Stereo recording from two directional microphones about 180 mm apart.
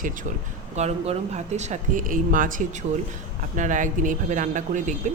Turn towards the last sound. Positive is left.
turn(degrees=-45)  # may be behind; listen again after turning